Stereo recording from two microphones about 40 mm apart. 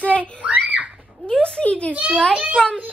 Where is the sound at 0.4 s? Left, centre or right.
Right.